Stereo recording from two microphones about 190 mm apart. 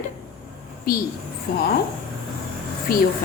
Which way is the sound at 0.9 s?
50° left (ahead or behind).